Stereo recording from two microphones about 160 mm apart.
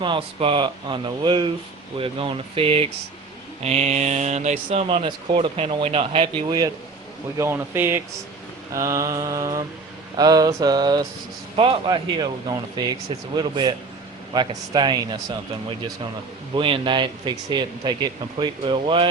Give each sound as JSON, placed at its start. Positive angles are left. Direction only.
{"t": 0.0, "sound": "speech", "side_deg": -30}
{"t": 7.3, "sound": "speech", "side_deg": -15}
{"t": 16.6, "sound": "speech", "side_deg": -35}